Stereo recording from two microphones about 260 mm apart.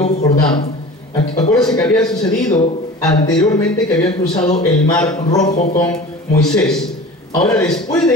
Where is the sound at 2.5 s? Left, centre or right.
Centre.